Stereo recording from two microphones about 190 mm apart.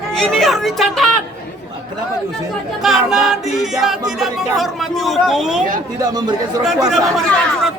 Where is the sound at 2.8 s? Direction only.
Centre (ahead or behind).